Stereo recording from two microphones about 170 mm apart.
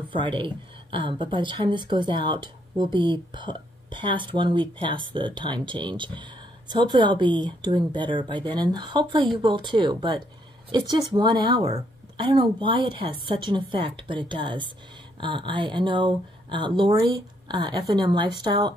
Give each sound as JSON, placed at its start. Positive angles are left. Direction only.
{"t": 0.1, "sound": "a woman's voice", "side_deg": -30}